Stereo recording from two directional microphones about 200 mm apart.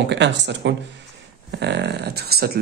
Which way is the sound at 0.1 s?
60° right (ahead or behind).